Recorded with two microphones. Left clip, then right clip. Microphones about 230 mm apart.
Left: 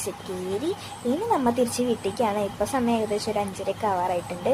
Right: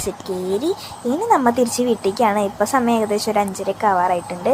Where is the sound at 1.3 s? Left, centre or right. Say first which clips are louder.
Right 8 dB; centre.